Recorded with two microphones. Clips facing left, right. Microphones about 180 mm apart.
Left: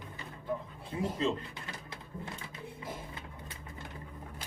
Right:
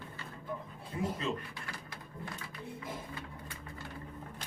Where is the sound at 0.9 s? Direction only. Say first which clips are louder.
Left 1 dB; 25° left (ahead or behind).